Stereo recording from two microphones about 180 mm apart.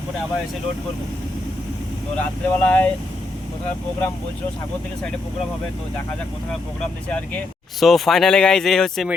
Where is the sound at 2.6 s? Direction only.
10° left (ahead or behind).